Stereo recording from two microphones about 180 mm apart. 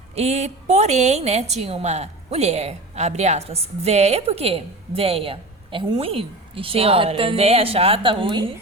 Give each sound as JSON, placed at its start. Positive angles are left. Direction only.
{"t": 0.2, "sound": "a woman's voice", "side_deg": -40}